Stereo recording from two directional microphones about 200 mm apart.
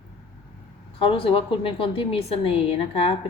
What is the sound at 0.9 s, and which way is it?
A woman's voice, 25° left (ahead or behind).